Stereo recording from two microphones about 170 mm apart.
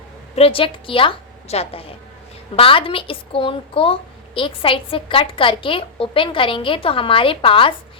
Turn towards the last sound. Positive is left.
turn(degrees=30)  # may be behind; listen again after turning